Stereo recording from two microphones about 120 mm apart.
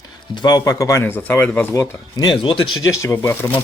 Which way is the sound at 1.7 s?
25° left (ahead or behind).